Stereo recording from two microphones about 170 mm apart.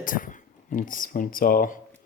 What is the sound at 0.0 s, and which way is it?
Speech, 55° left (ahead or behind).